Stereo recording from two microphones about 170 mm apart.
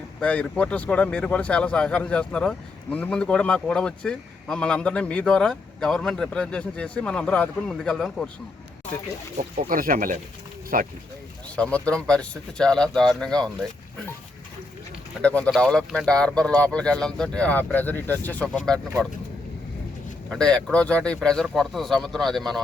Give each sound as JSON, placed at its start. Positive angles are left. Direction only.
{"t": 0.2, "sound": "speech", "side_deg": 5}
{"t": 9.6, "sound": "speech", "side_deg": -55}
{"t": 11.5, "sound": "speech", "side_deg": 5}
{"t": 15.2, "sound": "speech", "side_deg": 10}
{"t": 20.3, "sound": "speech", "side_deg": 5}